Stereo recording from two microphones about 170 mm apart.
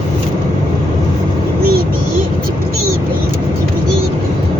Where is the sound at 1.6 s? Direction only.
65° right (ahead or behind).